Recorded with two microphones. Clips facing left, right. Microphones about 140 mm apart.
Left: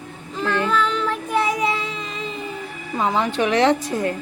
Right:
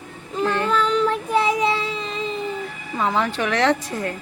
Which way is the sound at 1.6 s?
30° right (ahead or behind).